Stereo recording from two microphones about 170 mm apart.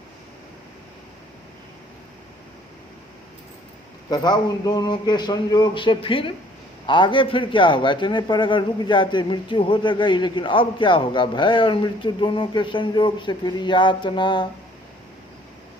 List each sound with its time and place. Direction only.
4.1 s a man's voice: 25° left (ahead or behind)